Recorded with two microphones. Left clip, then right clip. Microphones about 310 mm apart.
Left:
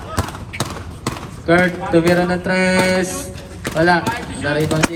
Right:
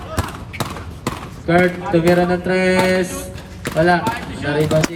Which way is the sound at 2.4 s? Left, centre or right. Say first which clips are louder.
Even; centre.